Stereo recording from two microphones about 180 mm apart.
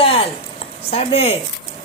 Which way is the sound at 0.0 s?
30° left (ahead or behind).